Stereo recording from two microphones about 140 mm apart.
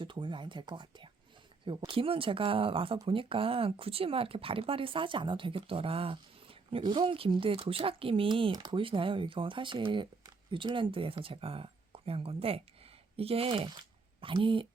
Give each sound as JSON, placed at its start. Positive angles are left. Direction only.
{"t": 0.0, "sound": "speech", "side_deg": -35}